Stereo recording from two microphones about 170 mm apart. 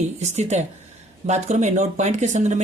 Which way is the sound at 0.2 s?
40° right (ahead or behind).